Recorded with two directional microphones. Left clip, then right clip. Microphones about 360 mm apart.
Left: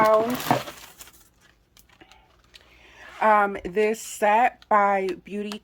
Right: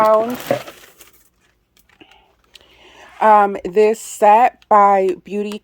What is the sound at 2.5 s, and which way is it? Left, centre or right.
Speech, right.